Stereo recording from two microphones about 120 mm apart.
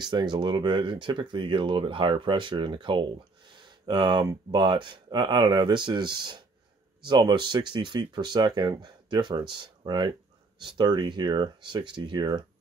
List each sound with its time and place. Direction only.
0.0 s speech: 35° right (ahead or behind)